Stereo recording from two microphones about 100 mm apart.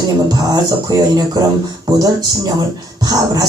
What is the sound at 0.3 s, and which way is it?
Speech, 40° right (ahead or behind).